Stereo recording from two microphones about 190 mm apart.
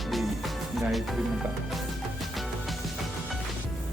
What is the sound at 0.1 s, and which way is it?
Music, centre (ahead or behind).